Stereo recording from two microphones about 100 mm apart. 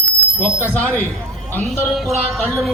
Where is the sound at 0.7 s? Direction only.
15° left (ahead or behind).